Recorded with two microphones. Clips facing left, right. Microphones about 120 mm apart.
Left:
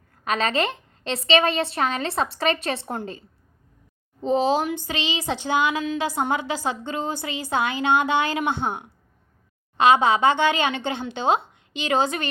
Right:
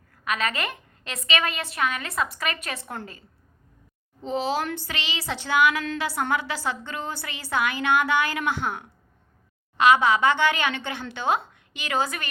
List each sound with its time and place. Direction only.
0.1 s a woman's voice: 30° left (ahead or behind)